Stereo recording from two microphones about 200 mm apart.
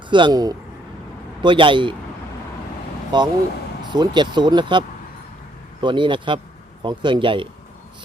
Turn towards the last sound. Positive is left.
turn(degrees=-25)  # may be behind; listen again after turning